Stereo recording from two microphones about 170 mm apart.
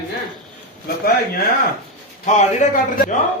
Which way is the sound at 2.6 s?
45° left (ahead or behind).